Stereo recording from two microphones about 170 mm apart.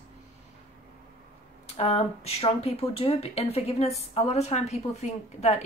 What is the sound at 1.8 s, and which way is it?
Speech, 35° left (ahead or behind).